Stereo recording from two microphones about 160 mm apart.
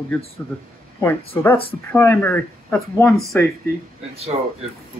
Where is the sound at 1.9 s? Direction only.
15° left (ahead or behind).